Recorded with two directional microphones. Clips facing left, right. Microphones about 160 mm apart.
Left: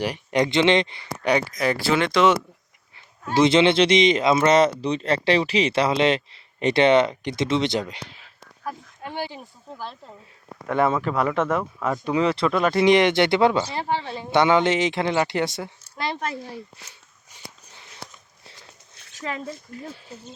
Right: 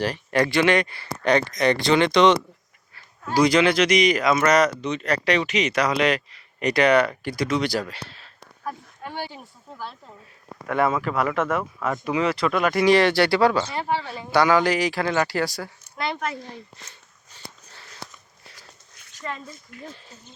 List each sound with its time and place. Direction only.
0.0 s speech: 15° left (ahead or behind)
2.9 s speech: 20° left (ahead or behind)
11.0 s speech: centre (ahead or behind)
12.1 s speech: 30° left (ahead or behind)
16.4 s a sound: 10° left (ahead or behind)
19.1 s a sound: 90° left
19.7 s speech: 35° left (ahead or behind)